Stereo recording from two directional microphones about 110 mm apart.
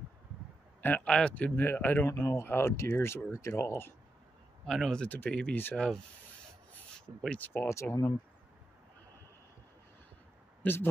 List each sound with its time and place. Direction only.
0.8 s a man's voice: 10° left (ahead or behind)
2.1 s speech: 30° left (ahead or behind)
4.6 s speech: centre (ahead or behind)
5.0 s a man's voice: 15° left (ahead or behind)
7.2 s speech: 10° left (ahead or behind); by 8.1 s 30° left (ahead or behind)
10.6 s speech: 20° left (ahead or behind)